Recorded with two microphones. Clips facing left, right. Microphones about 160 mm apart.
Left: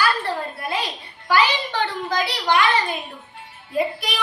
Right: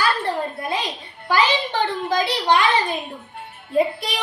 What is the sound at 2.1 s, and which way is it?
Speech, 25° right (ahead or behind).